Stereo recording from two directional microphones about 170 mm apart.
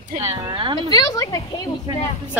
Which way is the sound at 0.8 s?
25° left (ahead or behind).